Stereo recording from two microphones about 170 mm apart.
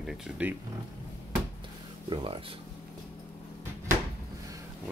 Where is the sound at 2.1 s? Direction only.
30° right (ahead or behind).